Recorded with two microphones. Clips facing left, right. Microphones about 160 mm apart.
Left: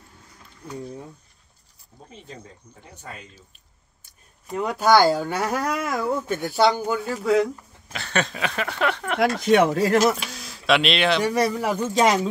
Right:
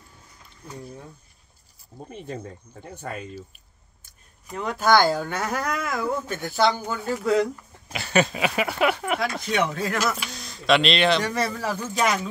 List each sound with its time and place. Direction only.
2.8 s speech: 50° right (ahead or behind)
4.6 s speech: 10° left (ahead or behind)
7.9 s speech: 5° right (ahead or behind)
9.2 s speech: 55° left (ahead or behind)
9.7 s speech: 40° left (ahead or behind)
10.3 s speech: 5° left (ahead or behind); by 12.3 s 30° left (ahead or behind)